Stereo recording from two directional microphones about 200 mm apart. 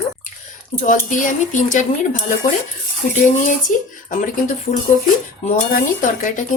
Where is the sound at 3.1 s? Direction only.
40° left (ahead or behind).